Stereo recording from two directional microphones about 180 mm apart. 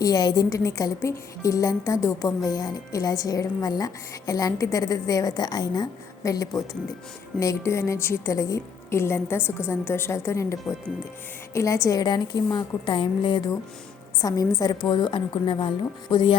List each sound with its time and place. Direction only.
0.0 s a woman's voice: 20° left (ahead or behind)